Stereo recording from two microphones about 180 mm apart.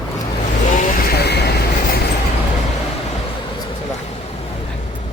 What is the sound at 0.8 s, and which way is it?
Vehicle, 60° left (ahead or behind).